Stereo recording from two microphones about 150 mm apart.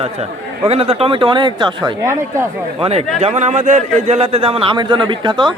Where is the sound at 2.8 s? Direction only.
45° right (ahead or behind).